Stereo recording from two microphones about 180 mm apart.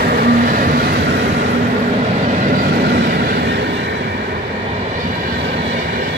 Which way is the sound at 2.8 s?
60° right (ahead or behind).